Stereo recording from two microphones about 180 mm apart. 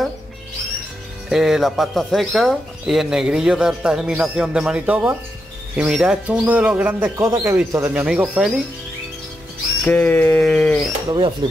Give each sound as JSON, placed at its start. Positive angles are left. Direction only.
{"t": 1.3, "sound": "speech", "side_deg": 0}
{"t": 9.8, "sound": "bird", "side_deg": 10}
{"t": 11.1, "sound": "speech", "side_deg": -25}